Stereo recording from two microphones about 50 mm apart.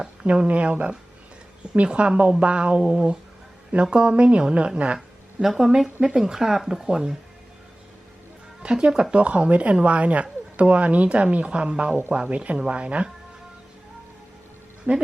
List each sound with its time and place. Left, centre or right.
0.0 s speech: right
4.9 s speech: centre
8.6 s speech: centre
14.9 s speech: right